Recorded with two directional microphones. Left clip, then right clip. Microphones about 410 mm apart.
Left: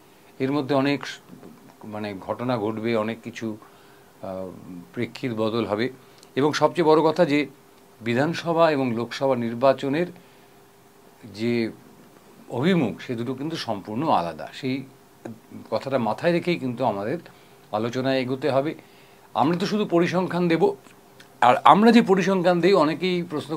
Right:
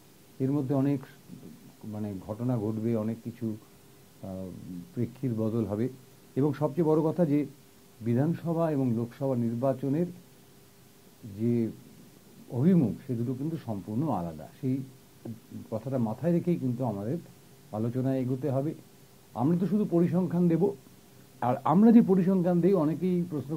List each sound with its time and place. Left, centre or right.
0.4 s a man's voice: centre
12.4 s a man's voice: centre